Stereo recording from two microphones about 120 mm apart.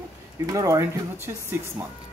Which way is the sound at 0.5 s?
25° right (ahead or behind).